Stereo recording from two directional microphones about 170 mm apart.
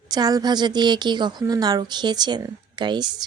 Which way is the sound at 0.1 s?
20° right (ahead or behind).